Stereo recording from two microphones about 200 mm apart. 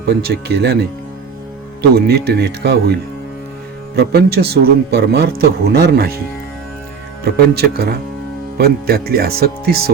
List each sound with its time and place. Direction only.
0.0 s speech: 50° right (ahead or behind)
2.0 s speech: 55° right (ahead or behind)
3.9 s speech: 55° right (ahead or behind)
7.3 s speech: 50° right (ahead or behind)